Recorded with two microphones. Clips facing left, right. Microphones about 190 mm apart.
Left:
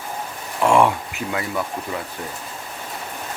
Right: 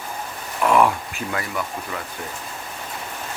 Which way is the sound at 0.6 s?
25° left (ahead or behind).